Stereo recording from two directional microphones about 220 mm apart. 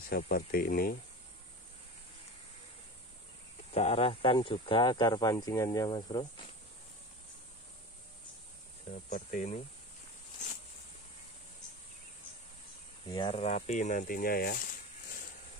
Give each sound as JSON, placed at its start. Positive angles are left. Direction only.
{"t": 0.1, "sound": "speech", "side_deg": 40}
{"t": 3.7, "sound": "speech", "side_deg": 30}
{"t": 9.1, "sound": "speech", "side_deg": 35}
{"t": 13.1, "sound": "speech", "side_deg": 25}